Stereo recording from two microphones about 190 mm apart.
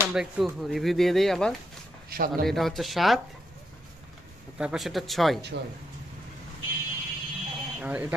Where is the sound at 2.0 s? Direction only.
50° right (ahead or behind).